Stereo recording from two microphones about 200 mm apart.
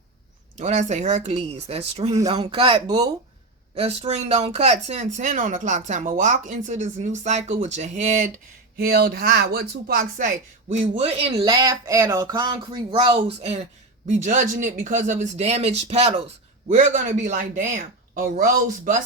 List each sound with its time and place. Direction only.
0.5 s speech: 35° right (ahead or behind); by 3.1 s 20° right (ahead or behind)
3.8 s speech: 30° right (ahead or behind)
8.8 s speech: 50° right (ahead or behind); by 11.3 s 30° right (ahead or behind)
11.3 s speech: 20° right (ahead or behind); by 18.9 s 45° right (ahead or behind)